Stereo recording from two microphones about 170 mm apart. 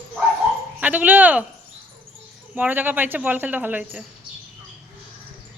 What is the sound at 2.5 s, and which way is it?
A woman's voice, 10° right (ahead or behind).